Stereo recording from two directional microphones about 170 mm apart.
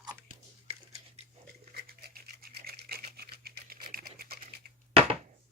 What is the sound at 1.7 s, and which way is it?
Toothbrush, 70° right (ahead or behind).